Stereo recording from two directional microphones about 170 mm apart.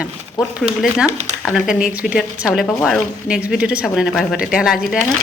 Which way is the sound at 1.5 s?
5° right (ahead or behind).